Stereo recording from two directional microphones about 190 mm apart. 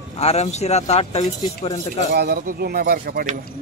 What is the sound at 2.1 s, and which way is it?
Speech, 55° right (ahead or behind).